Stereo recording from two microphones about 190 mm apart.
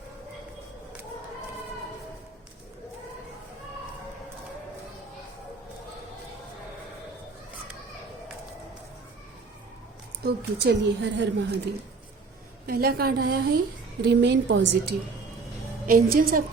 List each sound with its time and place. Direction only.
10.2 s a woman's voice: 60° right (ahead or behind)
12.6 s a woman's voice: 55° right (ahead or behind)
14.0 s a woman's voice: 65° right (ahead or behind)
15.9 s a woman's voice: 50° right (ahead or behind)